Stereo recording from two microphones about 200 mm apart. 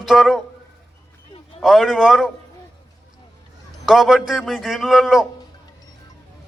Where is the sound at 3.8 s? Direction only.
Centre (ahead or behind).